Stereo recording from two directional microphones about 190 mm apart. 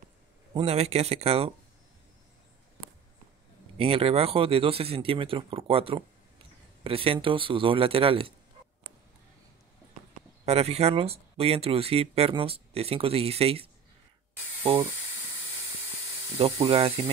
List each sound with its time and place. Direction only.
0.6 s speech: 35° right (ahead or behind)
3.7 s speech: 30° right (ahead or behind)
10.4 s speech: 35° right (ahead or behind)
16.3 s speech: 30° right (ahead or behind)